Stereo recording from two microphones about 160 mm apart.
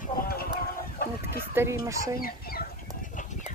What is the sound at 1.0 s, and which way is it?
Chicken, 70° left (ahead or behind).